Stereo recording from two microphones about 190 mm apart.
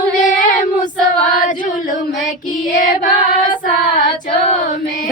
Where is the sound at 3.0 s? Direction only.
45° left (ahead or behind).